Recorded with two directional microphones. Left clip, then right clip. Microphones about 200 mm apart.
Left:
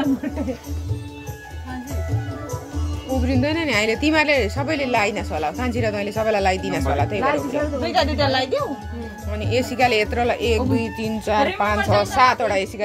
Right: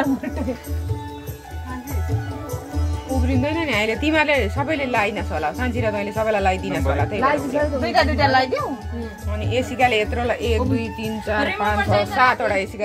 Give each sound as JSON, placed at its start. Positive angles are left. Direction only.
{"t": 3.3, "sound": "a woman's voice", "side_deg": 20}
{"t": 7.2, "sound": "a woman's voice", "side_deg": -25}
{"t": 9.3, "sound": "speech", "side_deg": 20}